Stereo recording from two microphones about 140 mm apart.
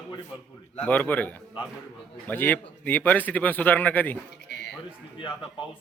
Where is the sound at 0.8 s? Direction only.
10° left (ahead or behind).